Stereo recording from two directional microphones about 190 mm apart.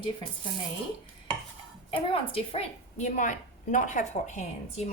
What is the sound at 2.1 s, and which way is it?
A woman's voice, 30° left (ahead or behind).